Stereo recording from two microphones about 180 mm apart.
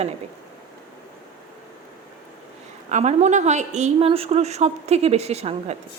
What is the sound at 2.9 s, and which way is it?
A woman's voice, 40° right (ahead or behind).